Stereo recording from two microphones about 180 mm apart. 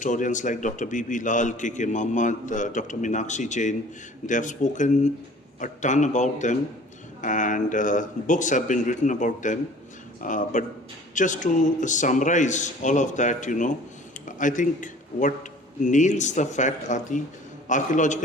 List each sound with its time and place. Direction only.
0.0 s a man's voice: 45° left (ahead or behind)